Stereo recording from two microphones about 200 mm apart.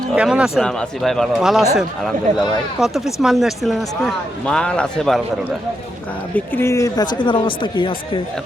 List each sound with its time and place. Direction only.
0.1 s a man's voice: 5° right (ahead or behind)
2.8 s a man's voice: centre (ahead or behind)
6.3 s speech: 10° left (ahead or behind)